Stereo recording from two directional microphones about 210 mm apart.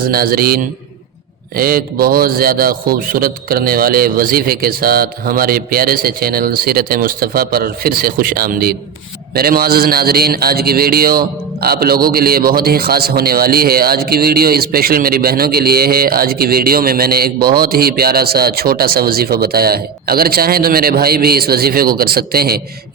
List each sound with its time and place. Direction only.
0.1 s speech: 45° right (ahead or behind)